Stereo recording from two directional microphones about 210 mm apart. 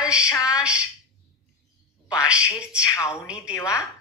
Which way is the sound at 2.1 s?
5° right (ahead or behind).